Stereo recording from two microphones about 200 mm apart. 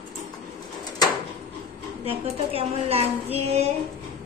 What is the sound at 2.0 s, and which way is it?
A woman's voice, 30° right (ahead or behind).